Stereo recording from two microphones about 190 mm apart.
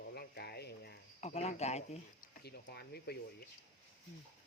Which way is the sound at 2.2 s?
55° left (ahead or behind).